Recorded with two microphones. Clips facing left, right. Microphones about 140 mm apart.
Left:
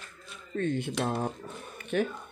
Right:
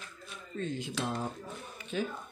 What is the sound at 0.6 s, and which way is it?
Speech, 60° left (ahead or behind).